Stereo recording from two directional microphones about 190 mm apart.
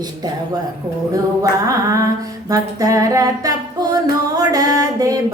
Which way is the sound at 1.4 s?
15° right (ahead or behind).